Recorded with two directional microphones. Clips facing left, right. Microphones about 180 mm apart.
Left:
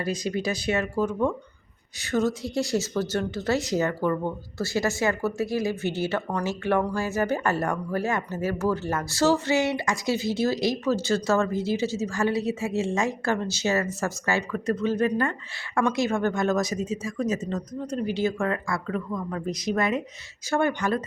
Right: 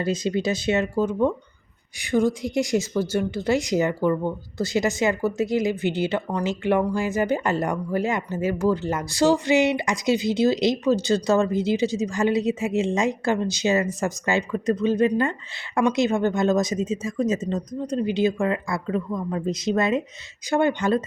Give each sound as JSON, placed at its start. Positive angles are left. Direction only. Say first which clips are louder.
{"t": 0.0, "sound": "speech", "louder": "right 4 dB", "side_deg": -25}